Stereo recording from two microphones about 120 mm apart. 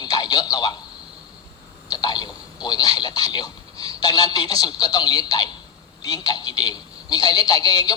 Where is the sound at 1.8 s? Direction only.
35° left (ahead or behind).